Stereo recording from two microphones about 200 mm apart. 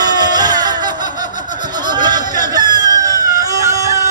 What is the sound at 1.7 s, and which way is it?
Chicken, 20° right (ahead or behind).